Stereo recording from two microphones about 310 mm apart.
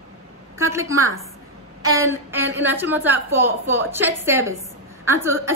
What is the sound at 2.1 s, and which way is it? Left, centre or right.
A woman's voice, centre.